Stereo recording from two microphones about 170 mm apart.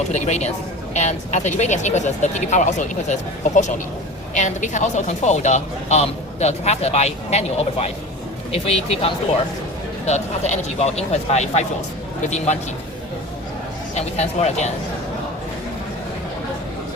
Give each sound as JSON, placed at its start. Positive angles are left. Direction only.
{"t": 0.1, "sound": "speech", "side_deg": 40}
{"t": 13.9, "sound": "speech", "side_deg": 40}